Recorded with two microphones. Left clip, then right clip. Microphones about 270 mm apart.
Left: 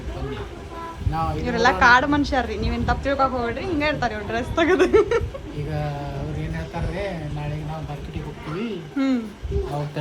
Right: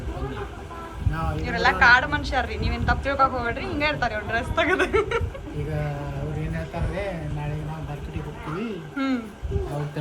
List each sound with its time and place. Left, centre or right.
1.4 s a woman's voice: left
9.0 s a woman's voice: centre